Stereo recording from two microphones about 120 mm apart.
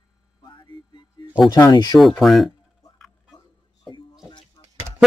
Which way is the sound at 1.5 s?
35° left (ahead or behind).